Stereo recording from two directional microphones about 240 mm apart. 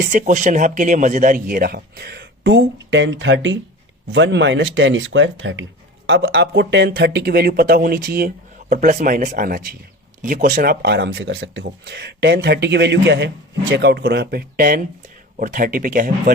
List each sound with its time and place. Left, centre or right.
0.1 s speech: right